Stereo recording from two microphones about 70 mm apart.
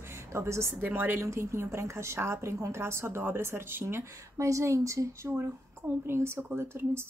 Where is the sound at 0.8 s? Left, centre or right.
Right.